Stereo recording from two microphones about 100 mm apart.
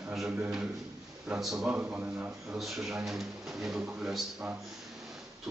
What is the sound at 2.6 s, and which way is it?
A man's voice, centre (ahead or behind).